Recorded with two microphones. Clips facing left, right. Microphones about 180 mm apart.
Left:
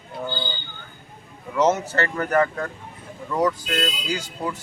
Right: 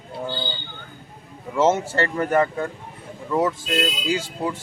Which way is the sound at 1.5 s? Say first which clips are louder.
Right 1 dB; 25° right (ahead or behind).